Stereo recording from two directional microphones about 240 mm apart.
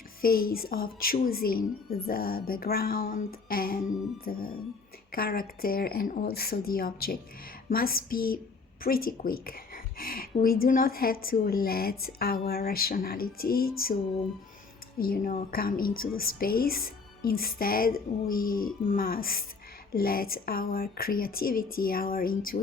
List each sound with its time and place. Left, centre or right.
0.2 s a woman's voice: left
14.9 s a woman's voice: left